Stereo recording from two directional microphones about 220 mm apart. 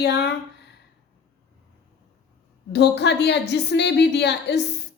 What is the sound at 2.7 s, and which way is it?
A woman's voice, 50° left (ahead or behind).